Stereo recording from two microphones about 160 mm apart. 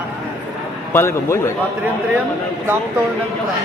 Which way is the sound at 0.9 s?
15° left (ahead or behind).